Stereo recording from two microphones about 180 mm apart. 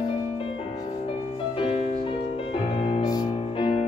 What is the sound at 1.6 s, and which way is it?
Music, 30° left (ahead or behind).